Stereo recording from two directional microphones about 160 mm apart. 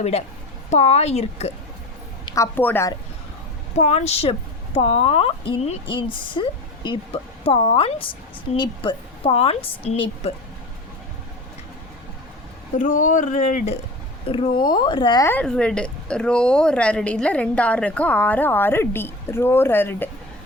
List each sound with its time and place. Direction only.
0.0 s speech: 40° left (ahead or behind)
2.2 s a woman's voice: 20° left (ahead or behind)
3.8 s speech: 40° left (ahead or behind)
12.7 s speech: 55° left (ahead or behind)
14.3 s speech: 35° left (ahead or behind)
15.3 s a woman's voice: 5° left (ahead or behind)